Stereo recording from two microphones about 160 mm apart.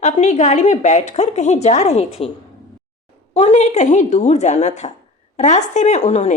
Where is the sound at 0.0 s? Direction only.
50° left (ahead or behind).